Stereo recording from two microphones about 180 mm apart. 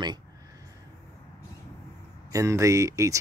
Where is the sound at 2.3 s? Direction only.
15° right (ahead or behind).